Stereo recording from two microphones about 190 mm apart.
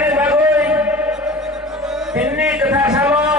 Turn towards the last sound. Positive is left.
turn(degrees=-5)  # may be behind; listen again after turning